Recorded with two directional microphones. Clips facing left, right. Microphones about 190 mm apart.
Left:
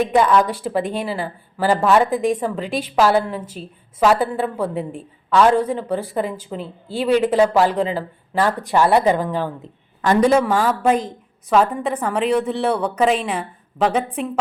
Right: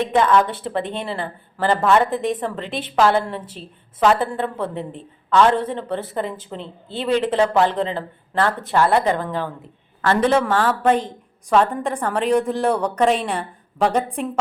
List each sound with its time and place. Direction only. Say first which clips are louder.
0.2 s speech: even; 10° left (ahead or behind)
2.6 s a woman's voice: left 4 dB; 25° right (ahead or behind)
2.9 s a woman's voice: left 1 dB; 5° left (ahead or behind)